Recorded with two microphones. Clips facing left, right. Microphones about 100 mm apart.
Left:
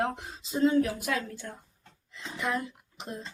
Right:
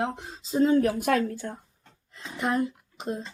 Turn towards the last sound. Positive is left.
turn(degrees=-30)  # may be behind; listen again after turning